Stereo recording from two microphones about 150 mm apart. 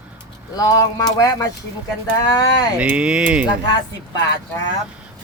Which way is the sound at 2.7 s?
10° right (ahead or behind).